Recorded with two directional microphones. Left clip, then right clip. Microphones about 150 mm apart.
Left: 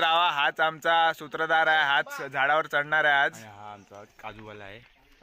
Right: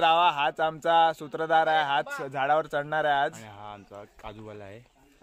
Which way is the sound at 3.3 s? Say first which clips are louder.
Right 1 dB; 80° left.